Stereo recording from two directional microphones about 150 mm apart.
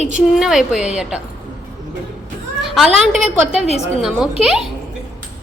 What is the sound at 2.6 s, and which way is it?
A woman's voice, centre (ahead or behind).